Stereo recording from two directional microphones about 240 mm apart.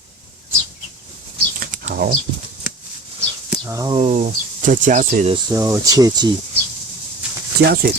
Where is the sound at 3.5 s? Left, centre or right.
Centre; by 5.4 s right.